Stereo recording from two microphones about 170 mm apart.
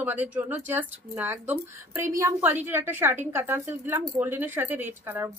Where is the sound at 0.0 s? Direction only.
10° right (ahead or behind).